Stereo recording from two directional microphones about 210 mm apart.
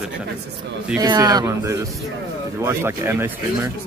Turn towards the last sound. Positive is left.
turn(degrees=-10)  # may be behind; listen again after turning